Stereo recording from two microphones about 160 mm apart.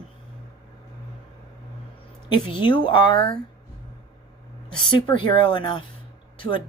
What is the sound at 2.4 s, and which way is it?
Speech, 30° left (ahead or behind).